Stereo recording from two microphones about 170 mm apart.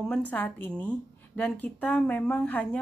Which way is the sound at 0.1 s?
10° left (ahead or behind).